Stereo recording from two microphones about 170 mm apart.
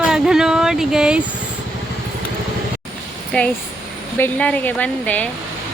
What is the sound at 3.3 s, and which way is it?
Speech, 5° left (ahead or behind).